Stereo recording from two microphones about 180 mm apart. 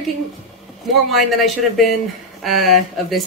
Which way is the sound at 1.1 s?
Centre (ahead or behind).